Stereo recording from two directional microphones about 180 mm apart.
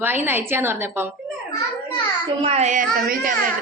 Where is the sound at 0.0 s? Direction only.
10° right (ahead or behind).